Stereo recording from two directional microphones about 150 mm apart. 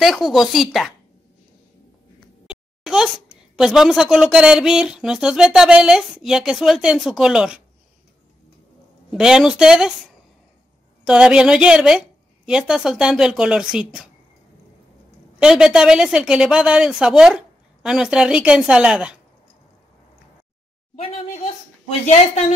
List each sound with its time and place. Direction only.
0.0 s speech: centre (ahead or behind)
2.4 s a sound: 5° right (ahead or behind)
3.5 s speech: centre (ahead or behind)
9.1 s speech: 5° right (ahead or behind)
15.3 s speech: 5° right (ahead or behind)
20.9 s a woman's voice: 40° left (ahead or behind)